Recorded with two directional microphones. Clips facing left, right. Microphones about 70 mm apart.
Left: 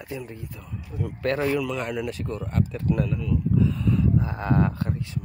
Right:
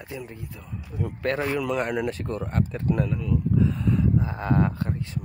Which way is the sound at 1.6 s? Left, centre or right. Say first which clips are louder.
Right 2 dB; right.